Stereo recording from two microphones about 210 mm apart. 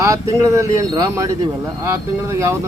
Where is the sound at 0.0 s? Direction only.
15° right (ahead or behind).